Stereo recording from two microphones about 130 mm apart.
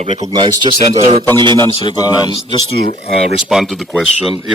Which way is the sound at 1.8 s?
35° left (ahead or behind).